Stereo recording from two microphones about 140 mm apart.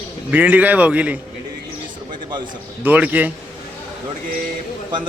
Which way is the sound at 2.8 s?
10° right (ahead or behind).